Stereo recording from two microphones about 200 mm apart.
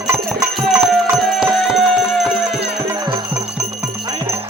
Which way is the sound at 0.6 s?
Centre (ahead or behind).